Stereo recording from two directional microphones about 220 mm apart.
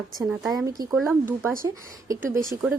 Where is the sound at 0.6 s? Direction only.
15° right (ahead or behind).